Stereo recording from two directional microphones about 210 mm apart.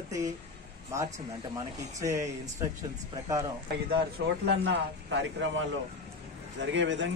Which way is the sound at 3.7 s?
45° right (ahead or behind).